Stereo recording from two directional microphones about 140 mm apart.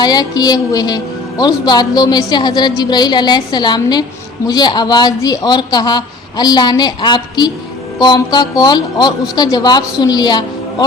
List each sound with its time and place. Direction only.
0.0 s a woman's voice: 30° left (ahead or behind)